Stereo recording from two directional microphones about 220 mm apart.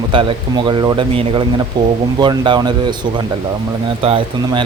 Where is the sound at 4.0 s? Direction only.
25° right (ahead or behind).